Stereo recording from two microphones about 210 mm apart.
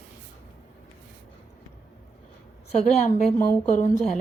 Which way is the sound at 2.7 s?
30° left (ahead or behind).